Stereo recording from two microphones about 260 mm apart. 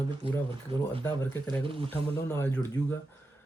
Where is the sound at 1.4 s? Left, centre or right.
Centre.